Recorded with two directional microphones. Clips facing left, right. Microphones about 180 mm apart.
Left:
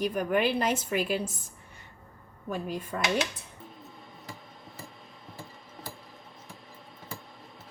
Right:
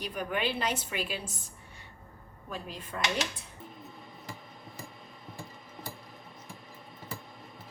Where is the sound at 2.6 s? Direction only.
45° left (ahead or behind).